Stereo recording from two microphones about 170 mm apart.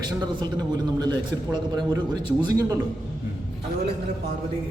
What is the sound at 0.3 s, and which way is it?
Speech, 25° right (ahead or behind).